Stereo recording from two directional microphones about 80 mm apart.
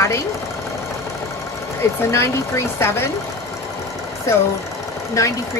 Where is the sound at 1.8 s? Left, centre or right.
Left.